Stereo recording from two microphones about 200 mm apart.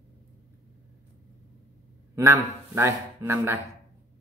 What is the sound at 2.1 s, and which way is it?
A man's voice, 15° right (ahead or behind).